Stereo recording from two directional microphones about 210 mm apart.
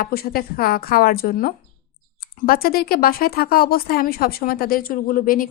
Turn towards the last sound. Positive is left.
turn(degrees=40)  # may be behind; listen again after turning